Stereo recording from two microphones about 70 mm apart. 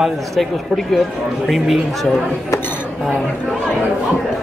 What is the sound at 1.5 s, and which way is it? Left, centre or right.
Speech, centre.